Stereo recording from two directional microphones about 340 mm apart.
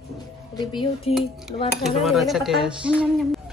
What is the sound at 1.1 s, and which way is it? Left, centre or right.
Speech, centre.